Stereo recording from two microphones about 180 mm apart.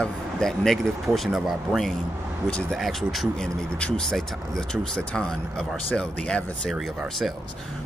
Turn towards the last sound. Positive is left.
turn(degrees=0)  # may be behind; listen again after turning